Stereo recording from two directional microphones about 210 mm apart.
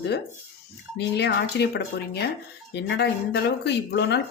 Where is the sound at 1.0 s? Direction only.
55° left (ahead or behind).